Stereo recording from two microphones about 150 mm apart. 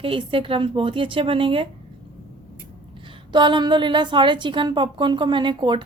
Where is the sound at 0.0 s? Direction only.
35° right (ahead or behind).